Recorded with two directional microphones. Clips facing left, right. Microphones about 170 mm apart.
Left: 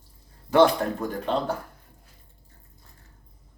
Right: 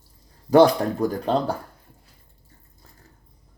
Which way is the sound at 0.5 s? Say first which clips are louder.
Right 4 dB; 35° right (ahead or behind).